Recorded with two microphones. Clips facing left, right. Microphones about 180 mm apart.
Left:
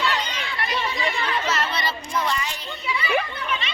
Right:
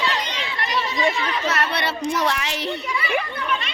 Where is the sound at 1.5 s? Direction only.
65° right (ahead or behind).